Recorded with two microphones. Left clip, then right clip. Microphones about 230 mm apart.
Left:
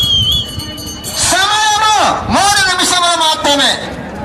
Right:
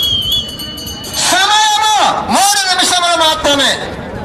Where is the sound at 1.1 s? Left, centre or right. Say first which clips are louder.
Right 1 dB; right.